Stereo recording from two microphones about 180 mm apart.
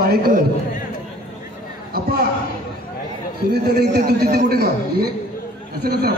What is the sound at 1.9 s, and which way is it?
Speech, 60° right (ahead or behind).